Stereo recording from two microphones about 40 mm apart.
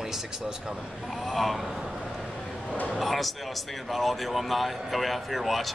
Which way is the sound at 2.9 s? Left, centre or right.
Centre.